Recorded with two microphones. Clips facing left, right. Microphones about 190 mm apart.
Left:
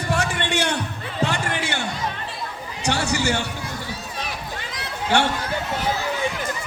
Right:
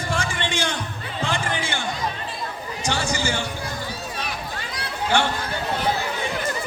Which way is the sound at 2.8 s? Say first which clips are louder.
Left 3 dB; 70° left (ahead or behind).